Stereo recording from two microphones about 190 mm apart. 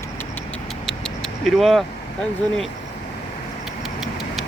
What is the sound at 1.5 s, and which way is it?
Speech, centre (ahead or behind).